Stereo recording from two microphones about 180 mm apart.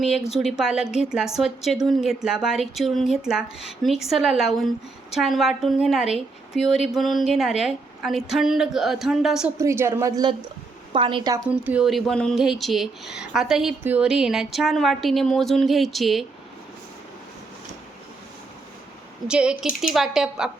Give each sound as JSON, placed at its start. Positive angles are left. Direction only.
{"t": 0.0, "sound": "speech", "side_deg": 0}
{"t": 9.6, "sound": "a woman's voice", "side_deg": -15}
{"t": 11.4, "sound": "speech", "side_deg": -10}
{"t": 19.3, "sound": "speech", "side_deg": -5}